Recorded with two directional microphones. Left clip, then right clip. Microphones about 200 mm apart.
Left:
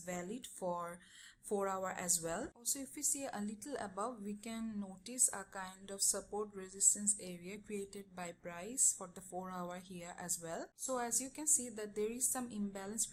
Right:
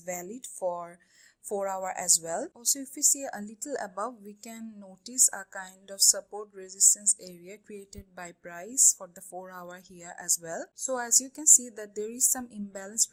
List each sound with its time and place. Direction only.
0.0 s a woman's voice: 25° right (ahead or behind)